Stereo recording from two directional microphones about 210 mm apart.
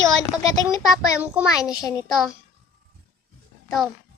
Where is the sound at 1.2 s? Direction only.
5° right (ahead or behind).